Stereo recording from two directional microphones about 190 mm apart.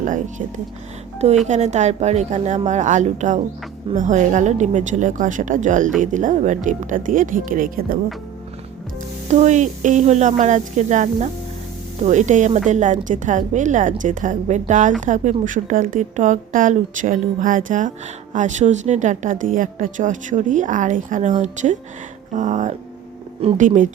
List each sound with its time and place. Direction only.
0.0 s a woman's voice: 40° right (ahead or behind)
1.5 s a woman's voice: 35° right (ahead or behind)
9.3 s a woman's voice: 40° right (ahead or behind)
22.3 s a sound: 40° right (ahead or behind)
23.4 s a woman's voice: 35° right (ahead or behind)